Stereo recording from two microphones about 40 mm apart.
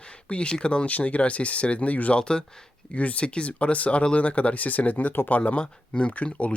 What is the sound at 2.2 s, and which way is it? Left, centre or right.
Speech, left.